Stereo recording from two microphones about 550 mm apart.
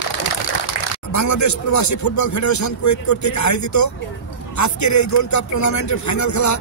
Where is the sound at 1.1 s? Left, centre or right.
Left.